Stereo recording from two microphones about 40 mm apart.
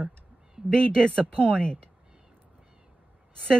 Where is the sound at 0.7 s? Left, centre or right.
Left.